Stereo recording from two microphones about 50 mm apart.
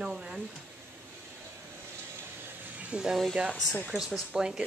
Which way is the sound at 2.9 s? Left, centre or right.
Centre.